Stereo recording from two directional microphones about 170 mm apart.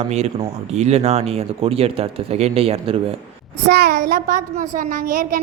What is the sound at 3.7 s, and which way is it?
A woman's voice, 70° right (ahead or behind).